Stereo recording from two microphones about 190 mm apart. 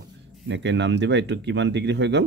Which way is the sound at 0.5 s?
70° right (ahead or behind).